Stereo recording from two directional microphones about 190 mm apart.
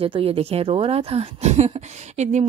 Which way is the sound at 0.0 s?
30° right (ahead or behind).